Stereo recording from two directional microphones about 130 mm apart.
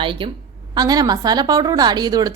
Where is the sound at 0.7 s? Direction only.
30° right (ahead or behind).